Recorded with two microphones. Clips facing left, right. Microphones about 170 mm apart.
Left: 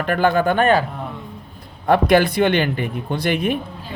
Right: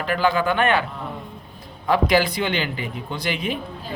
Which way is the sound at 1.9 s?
55° left (ahead or behind).